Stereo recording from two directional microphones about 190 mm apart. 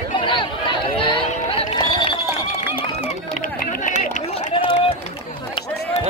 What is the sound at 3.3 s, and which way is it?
Run, 45° left (ahead or behind).